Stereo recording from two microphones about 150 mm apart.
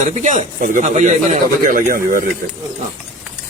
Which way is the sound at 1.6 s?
65° right (ahead or behind).